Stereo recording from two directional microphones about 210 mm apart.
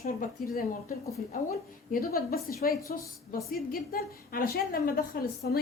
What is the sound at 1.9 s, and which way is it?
A woman's voice, 45° left (ahead or behind).